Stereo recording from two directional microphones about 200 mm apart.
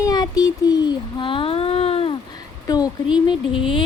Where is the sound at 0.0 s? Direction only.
20° left (ahead or behind).